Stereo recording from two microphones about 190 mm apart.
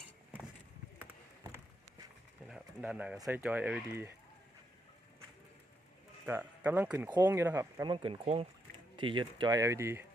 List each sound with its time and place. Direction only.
2.5 s a sound: 5° right (ahead or behind)
3.2 s speech: 10° right (ahead or behind)
6.2 s speech: 10° right (ahead or behind)